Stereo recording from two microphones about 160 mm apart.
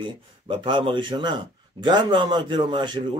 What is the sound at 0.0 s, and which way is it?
Speech, 30° right (ahead or behind).